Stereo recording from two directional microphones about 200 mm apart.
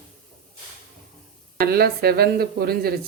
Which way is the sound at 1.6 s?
50° right (ahead or behind).